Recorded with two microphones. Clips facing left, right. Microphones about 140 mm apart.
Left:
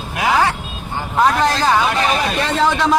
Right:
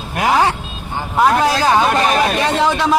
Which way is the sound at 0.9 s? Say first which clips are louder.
Right 1 dB; 10° right (ahead or behind).